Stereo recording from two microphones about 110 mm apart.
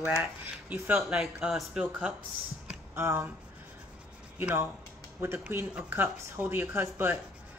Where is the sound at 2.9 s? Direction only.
25° right (ahead or behind).